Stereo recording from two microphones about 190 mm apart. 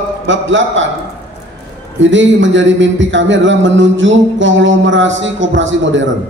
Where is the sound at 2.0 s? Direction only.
75° right (ahead or behind).